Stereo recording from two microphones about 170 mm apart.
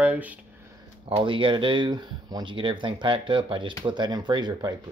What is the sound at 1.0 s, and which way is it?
Speech, 30° right (ahead or behind).